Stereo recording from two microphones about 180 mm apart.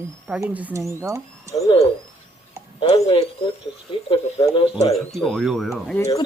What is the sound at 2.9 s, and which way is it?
Speech, 30° left (ahead or behind).